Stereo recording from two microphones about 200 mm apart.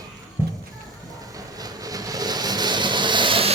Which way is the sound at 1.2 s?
20° right (ahead or behind).